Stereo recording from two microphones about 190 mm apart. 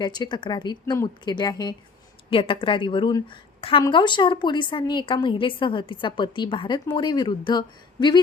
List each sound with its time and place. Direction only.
0.0 s a woman's voice: 25° left (ahead or behind)